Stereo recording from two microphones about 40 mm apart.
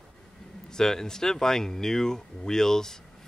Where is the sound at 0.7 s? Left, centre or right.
Centre.